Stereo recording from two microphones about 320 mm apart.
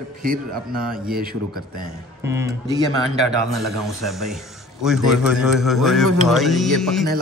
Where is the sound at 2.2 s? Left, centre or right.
Centre.